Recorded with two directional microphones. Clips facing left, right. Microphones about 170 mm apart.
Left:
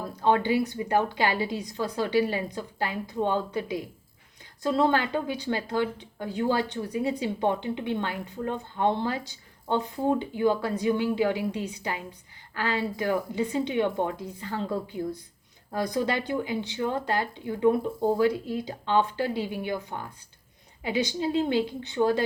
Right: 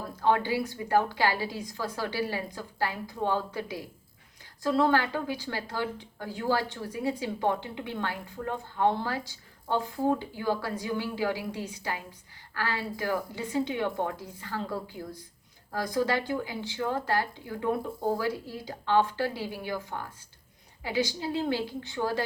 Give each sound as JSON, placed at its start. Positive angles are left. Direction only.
{"t": 0.2, "sound": "a woman's voice", "side_deg": 20}